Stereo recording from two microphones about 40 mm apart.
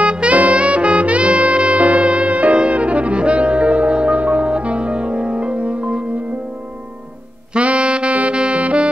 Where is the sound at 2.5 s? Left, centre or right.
Right.